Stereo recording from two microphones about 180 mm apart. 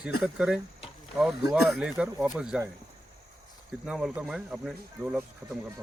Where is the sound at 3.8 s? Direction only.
5° right (ahead or behind).